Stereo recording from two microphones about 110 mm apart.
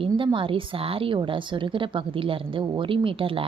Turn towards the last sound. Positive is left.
turn(degrees=-55)  # may be behind; listen again after turning